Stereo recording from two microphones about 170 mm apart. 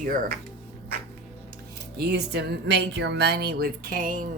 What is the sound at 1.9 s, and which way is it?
Speech, 75° right (ahead or behind).